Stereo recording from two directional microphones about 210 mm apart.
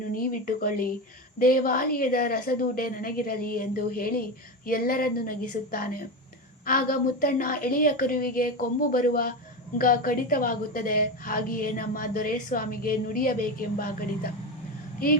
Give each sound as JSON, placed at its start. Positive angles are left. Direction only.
{"t": 0.1, "sound": "a woman's voice", "side_deg": 40}